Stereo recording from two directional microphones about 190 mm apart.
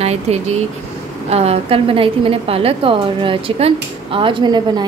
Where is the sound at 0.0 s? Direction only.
35° right (ahead or behind).